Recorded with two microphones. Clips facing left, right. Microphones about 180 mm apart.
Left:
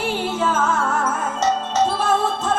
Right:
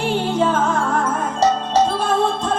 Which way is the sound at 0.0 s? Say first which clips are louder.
Right 3 dB; 5° left (ahead or behind).